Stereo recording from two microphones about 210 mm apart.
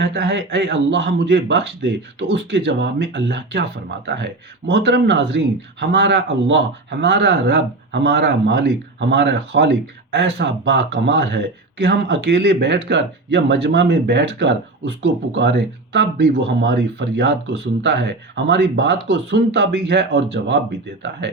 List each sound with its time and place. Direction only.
0.0 s speech: 55° right (ahead or behind)